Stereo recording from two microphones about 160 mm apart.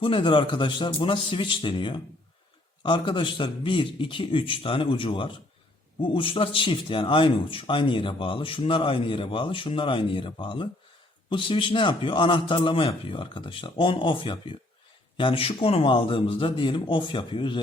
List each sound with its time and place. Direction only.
0.0 s speech: 35° left (ahead or behind)